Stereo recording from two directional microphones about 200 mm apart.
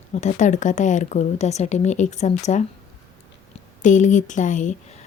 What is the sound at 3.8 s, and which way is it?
A woman's voice, 40° left (ahead or behind).